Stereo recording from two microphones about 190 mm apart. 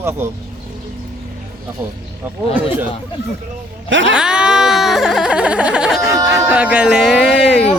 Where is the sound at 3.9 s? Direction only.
75° right (ahead or behind).